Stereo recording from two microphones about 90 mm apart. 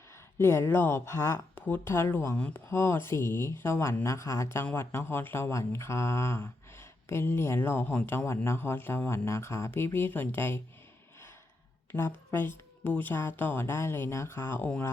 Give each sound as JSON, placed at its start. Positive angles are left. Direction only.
{"t": 0.3, "sound": "speech", "side_deg": 25}
{"t": 11.9, "sound": "speech", "side_deg": 25}